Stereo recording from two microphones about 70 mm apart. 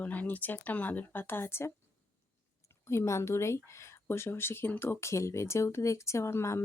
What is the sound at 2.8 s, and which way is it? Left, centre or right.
Speech, left.